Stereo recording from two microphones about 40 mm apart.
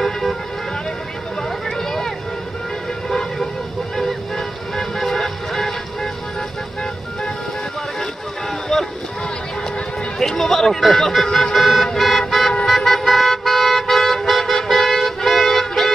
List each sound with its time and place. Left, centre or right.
0.0 s vehicle: centre
1.9 s a sound: centre
3.1 s vehicle: centre
8.7 s boat: centre
10.1 s music: centre
11.2 s vehicle: centre
11.5 s vehicle: centre
12.6 s toot: centre